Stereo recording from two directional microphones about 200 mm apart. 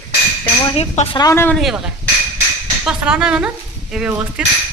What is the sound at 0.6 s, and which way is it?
Speech, 30° left (ahead or behind).